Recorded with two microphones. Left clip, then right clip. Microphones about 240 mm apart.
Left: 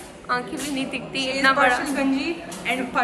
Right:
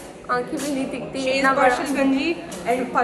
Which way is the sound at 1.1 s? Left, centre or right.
Left.